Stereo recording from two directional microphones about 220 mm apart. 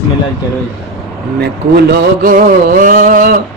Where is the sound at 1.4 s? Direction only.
50° right (ahead or behind).